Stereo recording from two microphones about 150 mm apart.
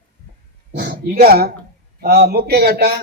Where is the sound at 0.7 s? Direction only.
90° right.